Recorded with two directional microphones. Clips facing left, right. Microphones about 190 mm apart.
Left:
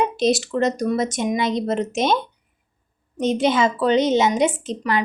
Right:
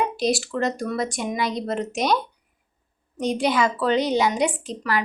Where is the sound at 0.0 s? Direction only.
20° left (ahead or behind).